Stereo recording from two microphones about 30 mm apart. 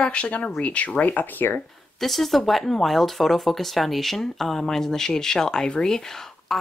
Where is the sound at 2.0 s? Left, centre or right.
Centre; by 5.7 s left.